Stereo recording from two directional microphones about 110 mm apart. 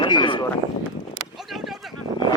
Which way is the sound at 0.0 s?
45° left (ahead or behind).